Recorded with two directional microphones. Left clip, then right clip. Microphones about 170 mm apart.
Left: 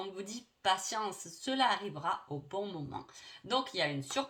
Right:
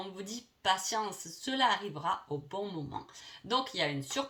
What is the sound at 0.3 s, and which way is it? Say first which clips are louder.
Speech: right 1 dB; 35° left (ahead or behind).